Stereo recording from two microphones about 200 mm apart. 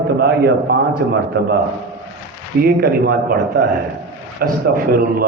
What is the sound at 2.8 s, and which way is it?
A man's voice, 50° right (ahead or behind).